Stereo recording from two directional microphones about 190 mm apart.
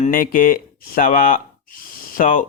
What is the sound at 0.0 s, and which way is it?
Speech, 45° left (ahead or behind).